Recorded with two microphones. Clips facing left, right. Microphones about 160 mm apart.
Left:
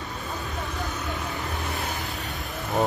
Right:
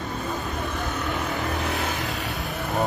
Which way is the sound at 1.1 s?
75° right (ahead or behind).